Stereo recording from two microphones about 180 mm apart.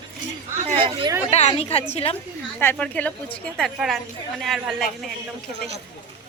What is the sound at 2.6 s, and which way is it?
A woman's voice, 10° left (ahead or behind).